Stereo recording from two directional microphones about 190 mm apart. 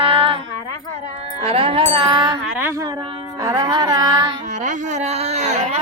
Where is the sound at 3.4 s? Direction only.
20° right (ahead or behind).